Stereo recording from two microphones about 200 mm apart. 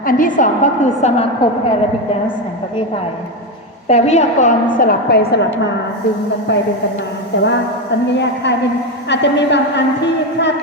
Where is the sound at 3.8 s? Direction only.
35° left (ahead or behind); by 5.4 s 50° left (ahead or behind).